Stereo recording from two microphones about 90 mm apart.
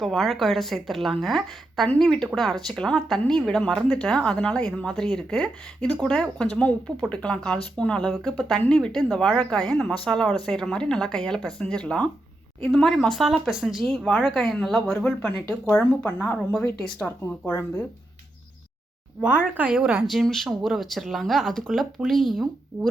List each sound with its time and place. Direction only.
0.0 s speech: 5° left (ahead or behind)
19.5 s speech: 15° right (ahead or behind)
20.1 s speech: centre (ahead or behind)